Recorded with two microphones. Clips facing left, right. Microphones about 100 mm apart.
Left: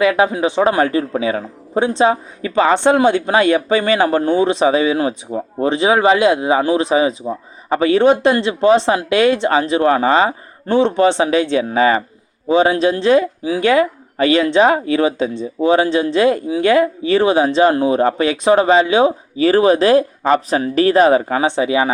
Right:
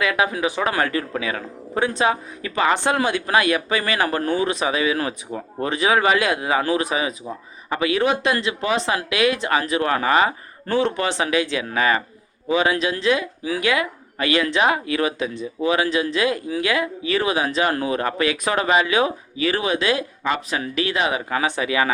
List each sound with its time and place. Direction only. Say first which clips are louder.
0.0 s a man's voice: left 7 dB; 30° left (ahead or behind)